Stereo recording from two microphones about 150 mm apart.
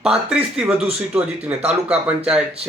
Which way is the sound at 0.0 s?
5° right (ahead or behind).